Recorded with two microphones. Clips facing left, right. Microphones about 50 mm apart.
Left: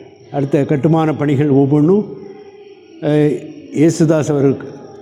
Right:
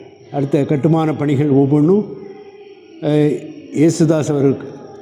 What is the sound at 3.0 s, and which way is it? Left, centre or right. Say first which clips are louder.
Speech: left 1 dB; left.